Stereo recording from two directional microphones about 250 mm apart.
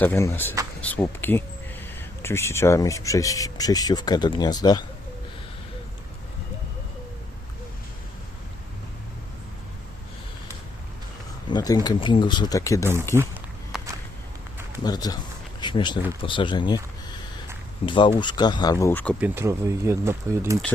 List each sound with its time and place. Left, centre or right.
0.0 s speech: centre
11.5 s speech: centre
13.1 s walk: centre
14.8 s speech: centre
17.8 s speech: centre
19.2 s speech: centre